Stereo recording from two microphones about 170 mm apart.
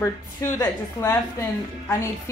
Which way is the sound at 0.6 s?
15° left (ahead or behind).